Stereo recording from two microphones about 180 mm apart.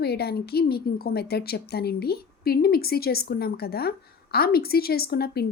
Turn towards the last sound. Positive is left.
turn(degrees=60)  # may be behind; listen again after turning